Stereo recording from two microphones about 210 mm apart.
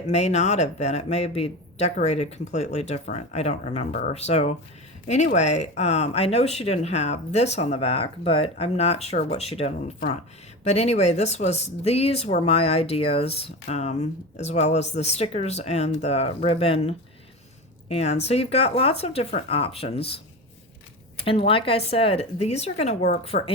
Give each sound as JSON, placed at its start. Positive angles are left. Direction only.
{"t": 0.1, "sound": "speech", "side_deg": 30}
{"t": 21.2, "sound": "speech", "side_deg": 25}